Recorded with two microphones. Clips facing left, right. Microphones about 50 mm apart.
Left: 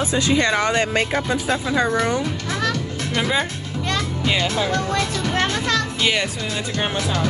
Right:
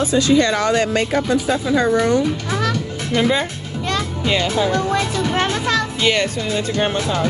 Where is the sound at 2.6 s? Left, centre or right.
Centre.